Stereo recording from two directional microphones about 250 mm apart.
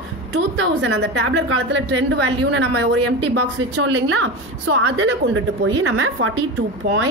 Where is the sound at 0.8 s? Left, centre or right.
Right.